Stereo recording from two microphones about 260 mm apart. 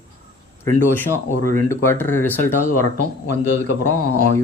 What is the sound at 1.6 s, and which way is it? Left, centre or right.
Speech, centre.